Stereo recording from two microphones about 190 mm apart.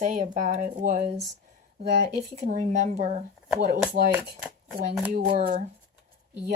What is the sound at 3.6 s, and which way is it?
Speech, 55° right (ahead or behind).